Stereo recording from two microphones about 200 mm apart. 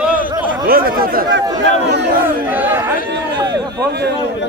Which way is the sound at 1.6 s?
60° right (ahead or behind).